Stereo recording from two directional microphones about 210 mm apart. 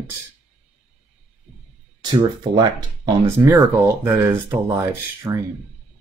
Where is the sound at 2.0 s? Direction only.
20° right (ahead or behind).